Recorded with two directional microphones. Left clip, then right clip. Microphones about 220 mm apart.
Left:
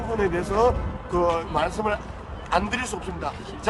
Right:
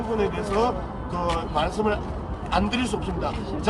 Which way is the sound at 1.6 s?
25° left (ahead or behind).